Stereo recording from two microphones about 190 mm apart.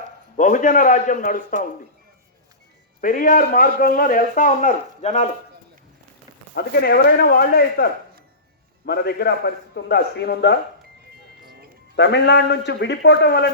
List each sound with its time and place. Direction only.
0.3 s a man's voice: 45° left (ahead or behind)
3.0 s a man's voice: 45° left (ahead or behind)
6.5 s a man's voice: 55° left (ahead or behind)
8.9 s a man's voice: 55° left (ahead or behind)
11.4 s music: 55° right (ahead or behind)
11.9 s a man's voice: 60° left (ahead or behind)